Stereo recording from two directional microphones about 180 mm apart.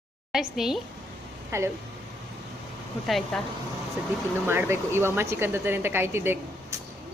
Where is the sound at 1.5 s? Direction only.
15° right (ahead or behind).